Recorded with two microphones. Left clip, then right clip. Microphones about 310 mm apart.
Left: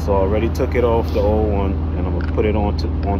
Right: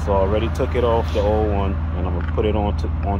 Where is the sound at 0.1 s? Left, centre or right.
Right.